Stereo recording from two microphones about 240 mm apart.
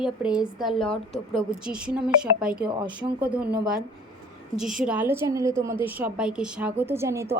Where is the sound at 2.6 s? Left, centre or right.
Centre.